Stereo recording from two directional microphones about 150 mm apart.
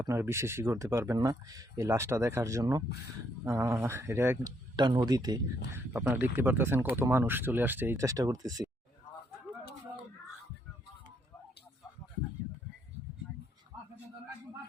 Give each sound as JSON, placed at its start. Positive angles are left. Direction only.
{"t": 0.0, "sound": "speech", "side_deg": -20}
{"t": 4.8, "sound": "speech", "side_deg": -30}
{"t": 5.7, "sound": "speech", "side_deg": -15}